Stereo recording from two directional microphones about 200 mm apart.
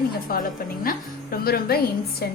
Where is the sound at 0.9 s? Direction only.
45° left (ahead or behind).